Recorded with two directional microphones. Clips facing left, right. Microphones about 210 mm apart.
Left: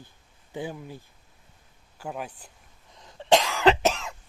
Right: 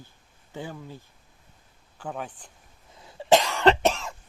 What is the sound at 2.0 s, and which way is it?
Speech, 10° left (ahead or behind).